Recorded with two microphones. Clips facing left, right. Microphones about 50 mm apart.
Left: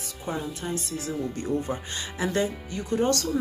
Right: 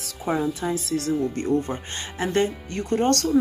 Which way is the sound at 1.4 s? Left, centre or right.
Right.